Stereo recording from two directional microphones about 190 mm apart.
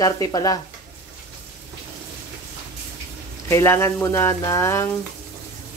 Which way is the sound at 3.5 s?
15° left (ahead or behind).